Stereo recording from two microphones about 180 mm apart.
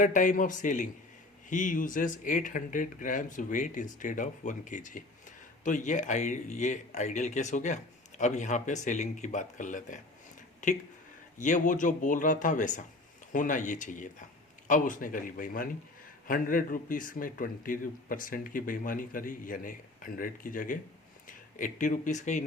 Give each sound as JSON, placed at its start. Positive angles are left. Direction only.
{"t": 0.0, "sound": "speech", "side_deg": 45}
{"t": 11.3, "sound": "speech", "side_deg": 45}